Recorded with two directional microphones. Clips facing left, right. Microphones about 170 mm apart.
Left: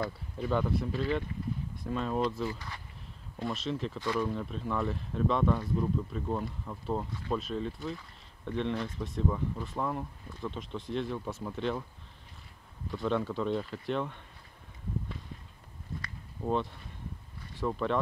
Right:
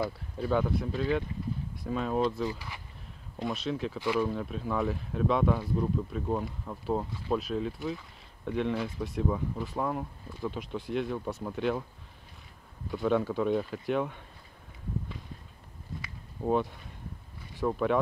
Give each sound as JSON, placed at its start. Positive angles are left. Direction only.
{"t": 0.0, "sound": "speech", "side_deg": -5}
{"t": 12.9, "sound": "speech", "side_deg": -5}
{"t": 16.0, "sound": "a sound", "side_deg": -5}
{"t": 17.6, "sound": "speech", "side_deg": -5}